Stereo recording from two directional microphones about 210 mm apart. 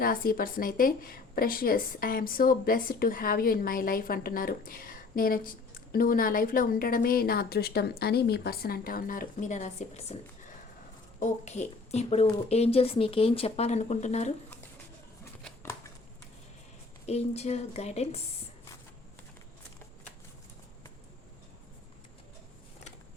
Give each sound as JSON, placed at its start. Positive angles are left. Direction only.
{"t": 0.0, "sound": "a woman's voice", "side_deg": 45}
{"t": 15.2, "sound": "shuffling cards", "side_deg": 10}
{"t": 17.1, "sound": "speech", "side_deg": 30}